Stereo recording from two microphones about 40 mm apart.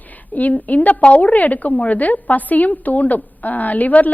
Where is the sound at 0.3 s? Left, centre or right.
Left.